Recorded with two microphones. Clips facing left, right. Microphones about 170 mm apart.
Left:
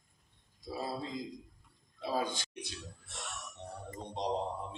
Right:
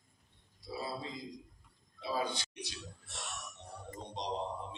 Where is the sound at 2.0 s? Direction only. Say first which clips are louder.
Left 2 dB; 45° left (ahead or behind).